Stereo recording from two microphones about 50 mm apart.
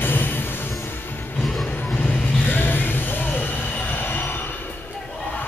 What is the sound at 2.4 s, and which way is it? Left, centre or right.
Train, left.